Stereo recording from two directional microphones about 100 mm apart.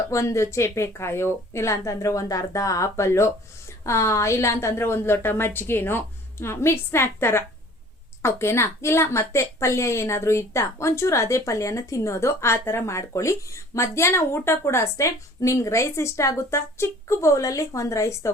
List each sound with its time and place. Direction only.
0.1 s a woman's voice: 30° left (ahead or behind)